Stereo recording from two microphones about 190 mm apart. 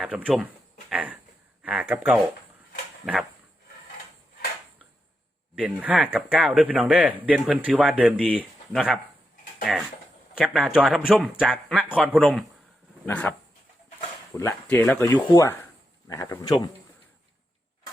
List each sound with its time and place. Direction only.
0.0 s speech: 5° right (ahead or behind)
0.9 s a sound: 5° right (ahead or behind)
1.6 s speech: 5° right (ahead or behind)
5.5 s speech: 5° right (ahead or behind)
13.1 s speech: 5° left (ahead or behind)
14.3 s speech: 15° left (ahead or behind)